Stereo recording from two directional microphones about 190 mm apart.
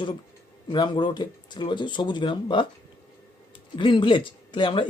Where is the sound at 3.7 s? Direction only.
25° left (ahead or behind).